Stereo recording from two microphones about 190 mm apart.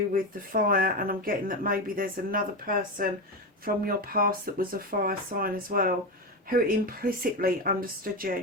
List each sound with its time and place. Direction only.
0.1 s speech: 45° right (ahead or behind)